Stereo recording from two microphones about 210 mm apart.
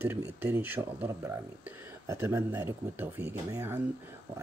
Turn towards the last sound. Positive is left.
turn(degrees=-10)  # may be behind; listen again after turning